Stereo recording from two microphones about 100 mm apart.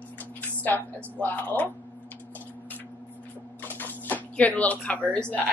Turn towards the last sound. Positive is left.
turn(degrees=15)  # may be behind; listen again after turning